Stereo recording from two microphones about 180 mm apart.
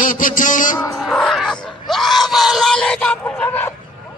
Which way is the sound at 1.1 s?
Centre (ahead or behind).